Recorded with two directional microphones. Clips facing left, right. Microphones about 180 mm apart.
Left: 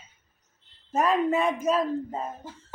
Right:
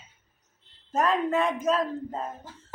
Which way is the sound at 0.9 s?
10° left (ahead or behind).